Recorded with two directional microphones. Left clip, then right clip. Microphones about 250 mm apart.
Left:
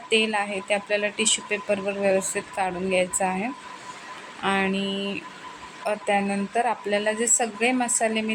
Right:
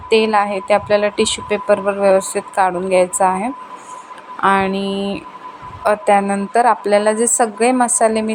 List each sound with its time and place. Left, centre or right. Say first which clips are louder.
0.1 s a woman's voice: right 9 dB; centre